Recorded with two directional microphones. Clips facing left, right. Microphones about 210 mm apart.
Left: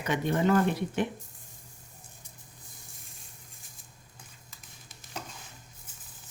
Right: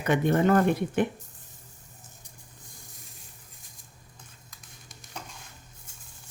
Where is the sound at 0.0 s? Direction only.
55° right (ahead or behind).